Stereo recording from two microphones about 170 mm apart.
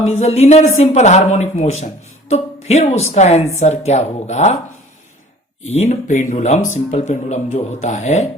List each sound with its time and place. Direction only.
0.0 s speech: 40° left (ahead or behind)
5.6 s speech: 40° left (ahead or behind)